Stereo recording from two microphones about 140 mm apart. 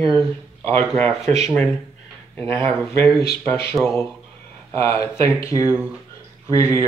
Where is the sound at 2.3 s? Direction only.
15° left (ahead or behind).